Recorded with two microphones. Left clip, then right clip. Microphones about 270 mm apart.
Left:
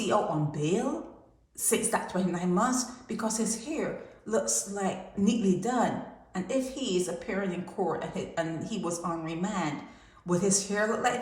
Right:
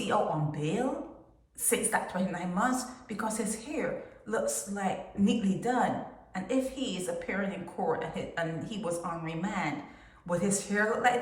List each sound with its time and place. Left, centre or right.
0.1 s a woman's voice: left